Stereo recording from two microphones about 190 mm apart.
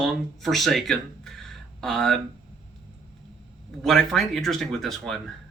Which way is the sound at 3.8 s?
Centre (ahead or behind).